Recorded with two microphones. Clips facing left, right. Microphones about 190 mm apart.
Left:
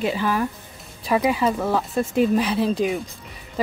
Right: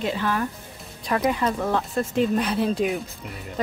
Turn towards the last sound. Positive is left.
turn(degrees=0)  # may be behind; listen again after turning